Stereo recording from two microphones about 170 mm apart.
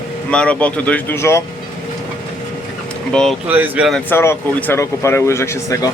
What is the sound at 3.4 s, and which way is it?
Speech, 10° right (ahead or behind).